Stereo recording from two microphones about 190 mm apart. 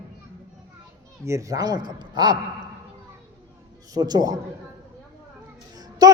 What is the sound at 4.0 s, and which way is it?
Speech, 20° right (ahead or behind).